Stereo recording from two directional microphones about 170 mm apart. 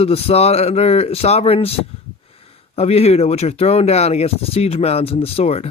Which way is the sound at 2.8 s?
35° left (ahead or behind).